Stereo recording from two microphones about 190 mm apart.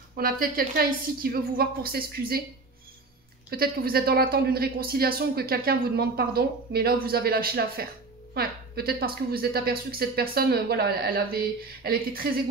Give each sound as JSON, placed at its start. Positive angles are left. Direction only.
{"t": 0.1, "sound": "speech", "side_deg": -50}
{"t": 3.4, "sound": "speech", "side_deg": -55}